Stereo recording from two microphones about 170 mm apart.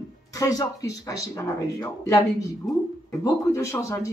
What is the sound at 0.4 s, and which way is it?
Speech, 20° left (ahead or behind).